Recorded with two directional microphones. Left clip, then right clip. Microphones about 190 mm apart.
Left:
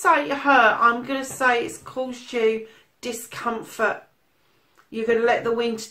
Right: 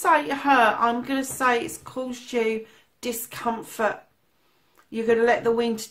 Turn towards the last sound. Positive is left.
turn(degrees=-40)  # may be behind; listen again after turning